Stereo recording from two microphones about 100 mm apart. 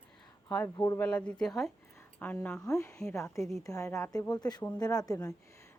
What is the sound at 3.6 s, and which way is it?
A woman's voice, 35° left (ahead or behind).